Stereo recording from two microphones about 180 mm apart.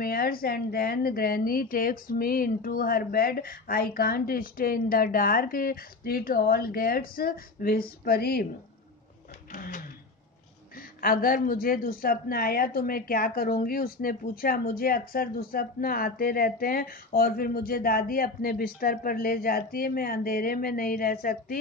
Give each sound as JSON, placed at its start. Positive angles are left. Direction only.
{"t": 0.0, "sound": "a woman's voice", "side_deg": 55}
{"t": 9.5, "sound": "drawer open or close", "side_deg": 50}
{"t": 11.0, "sound": "a woman's voice", "side_deg": 55}